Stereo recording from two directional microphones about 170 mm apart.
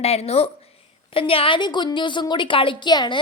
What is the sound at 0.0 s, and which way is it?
A woman's voice, 35° left (ahead or behind).